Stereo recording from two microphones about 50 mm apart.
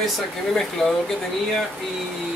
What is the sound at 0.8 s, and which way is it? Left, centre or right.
Speech, centre.